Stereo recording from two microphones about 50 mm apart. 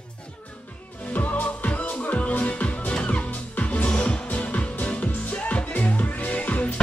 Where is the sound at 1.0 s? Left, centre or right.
Left.